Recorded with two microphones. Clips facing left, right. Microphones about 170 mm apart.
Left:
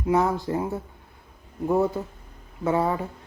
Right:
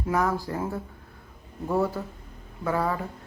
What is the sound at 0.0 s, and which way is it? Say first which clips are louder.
Speech: left 3 dB; 20° left (ahead or behind).